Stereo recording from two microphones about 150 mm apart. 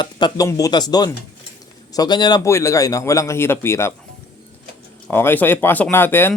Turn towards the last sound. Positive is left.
turn(degrees=15)  # may be behind; listen again after turning